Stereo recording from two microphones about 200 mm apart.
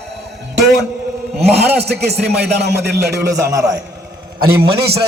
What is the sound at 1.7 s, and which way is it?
Music, 55° right (ahead or behind).